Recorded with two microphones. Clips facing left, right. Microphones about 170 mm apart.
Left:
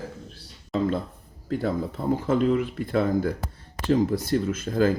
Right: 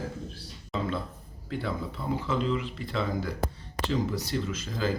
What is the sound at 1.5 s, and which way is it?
Speech, 45° left (ahead or behind).